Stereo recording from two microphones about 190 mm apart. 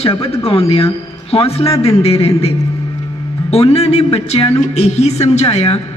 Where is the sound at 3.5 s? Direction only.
30° left (ahead or behind).